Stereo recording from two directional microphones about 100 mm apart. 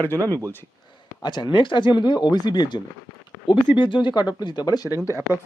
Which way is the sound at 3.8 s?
50° left (ahead or behind).